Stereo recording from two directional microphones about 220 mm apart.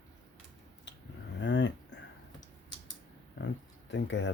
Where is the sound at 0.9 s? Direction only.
55° left (ahead or behind).